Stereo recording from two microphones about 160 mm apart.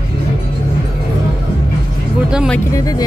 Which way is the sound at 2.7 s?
20° left (ahead or behind).